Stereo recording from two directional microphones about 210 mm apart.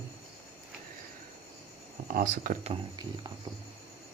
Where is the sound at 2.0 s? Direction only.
40° right (ahead or behind).